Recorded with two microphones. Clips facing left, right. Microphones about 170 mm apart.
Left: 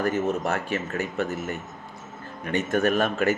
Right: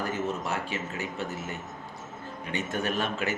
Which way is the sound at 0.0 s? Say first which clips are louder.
Left 6 dB; 55° left (ahead or behind).